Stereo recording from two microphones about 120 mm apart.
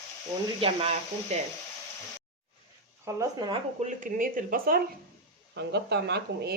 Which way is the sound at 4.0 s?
90° right.